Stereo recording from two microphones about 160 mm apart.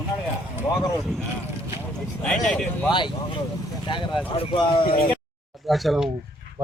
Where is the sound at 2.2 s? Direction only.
5° left (ahead or behind).